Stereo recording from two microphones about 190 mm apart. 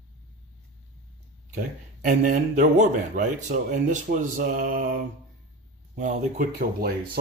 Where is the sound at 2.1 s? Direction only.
45° right (ahead or behind).